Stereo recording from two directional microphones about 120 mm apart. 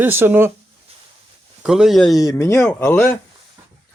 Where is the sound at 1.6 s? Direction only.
5° right (ahead or behind).